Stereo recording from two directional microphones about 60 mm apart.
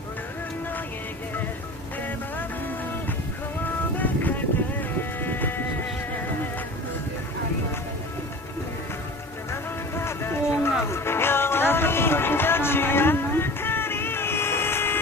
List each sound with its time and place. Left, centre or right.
4.0 s music: left
9.5 s music: left